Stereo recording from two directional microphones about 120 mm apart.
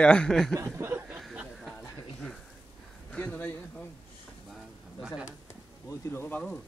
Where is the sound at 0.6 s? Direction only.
25° right (ahead or behind).